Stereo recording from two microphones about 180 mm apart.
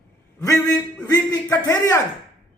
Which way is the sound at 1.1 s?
20° left (ahead or behind).